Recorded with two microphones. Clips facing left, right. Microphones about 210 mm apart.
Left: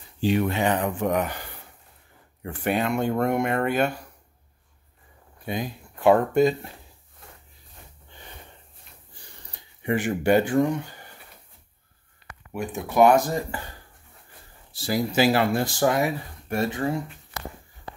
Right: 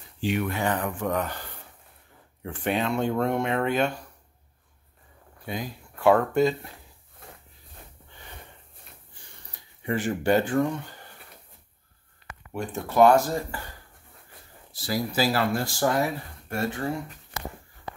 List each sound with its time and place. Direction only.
0.2 s speech: 30° left (ahead or behind); by 1.4 s 15° left (ahead or behind)
2.4 s speech: 5° left (ahead or behind)
5.5 s speech: 20° left (ahead or behind)
9.8 s speech: 15° left (ahead or behind)
12.5 s speech: 15° left (ahead or behind)
14.9 s speech: 20° left (ahead or behind)